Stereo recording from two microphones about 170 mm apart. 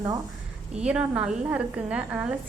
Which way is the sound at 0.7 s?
5° right (ahead or behind).